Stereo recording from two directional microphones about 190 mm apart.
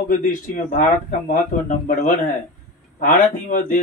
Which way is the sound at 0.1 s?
45° left (ahead or behind).